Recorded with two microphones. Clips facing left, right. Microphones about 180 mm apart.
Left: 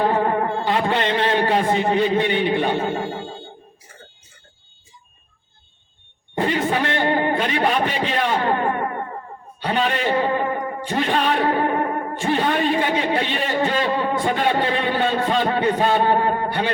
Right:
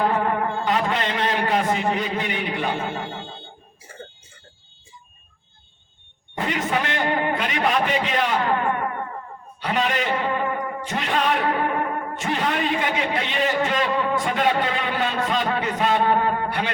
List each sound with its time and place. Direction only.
0.0 s music: 30° left (ahead or behind)
6.3 s a man's voice: 30° left (ahead or behind)
9.6 s music: 30° left (ahead or behind)